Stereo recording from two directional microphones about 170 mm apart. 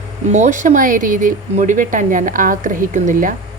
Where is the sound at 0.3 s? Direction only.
45° right (ahead or behind).